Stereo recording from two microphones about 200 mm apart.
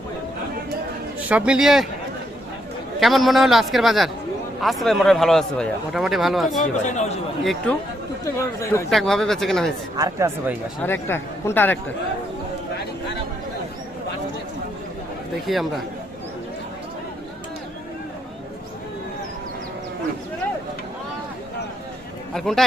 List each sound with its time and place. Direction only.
1.3 s speech: 5° right (ahead or behind)
3.0 s speech: centre (ahead or behind)
6.6 s speech: 35° left (ahead or behind)
8.2 s speech: 15° left (ahead or behind)
8.9 s speech: centre (ahead or behind)
10.0 s speech: 15° right (ahead or behind)
10.8 s speech: 10° left (ahead or behind)
15.5 s speech: centre (ahead or behind)
22.4 s speech: centre (ahead or behind)